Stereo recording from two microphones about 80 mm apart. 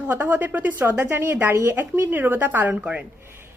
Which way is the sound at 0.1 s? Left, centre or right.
Right.